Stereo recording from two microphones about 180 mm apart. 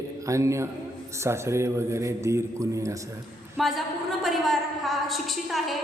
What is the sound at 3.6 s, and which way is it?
A woman's voice, centre (ahead or behind).